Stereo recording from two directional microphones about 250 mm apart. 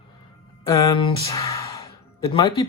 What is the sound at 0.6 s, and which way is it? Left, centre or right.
Speech, centre.